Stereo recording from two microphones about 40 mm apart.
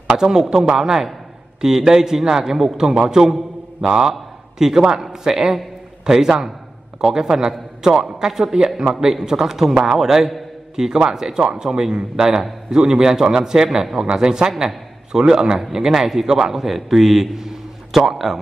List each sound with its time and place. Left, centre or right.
0.2 s a man's voice: centre